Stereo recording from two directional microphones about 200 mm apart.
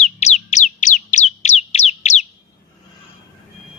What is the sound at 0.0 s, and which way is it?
Bird, 35° left (ahead or behind).